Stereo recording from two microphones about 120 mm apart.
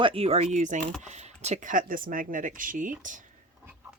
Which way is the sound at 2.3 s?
90° right.